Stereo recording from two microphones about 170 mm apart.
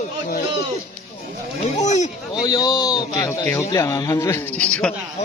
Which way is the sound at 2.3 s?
25° left (ahead or behind).